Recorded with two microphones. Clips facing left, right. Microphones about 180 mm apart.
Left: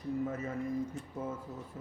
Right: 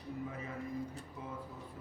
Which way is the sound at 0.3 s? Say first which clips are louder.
Left 7 dB; 45° left (ahead or behind).